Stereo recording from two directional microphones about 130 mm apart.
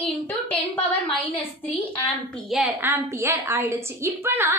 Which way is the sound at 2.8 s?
20° right (ahead or behind).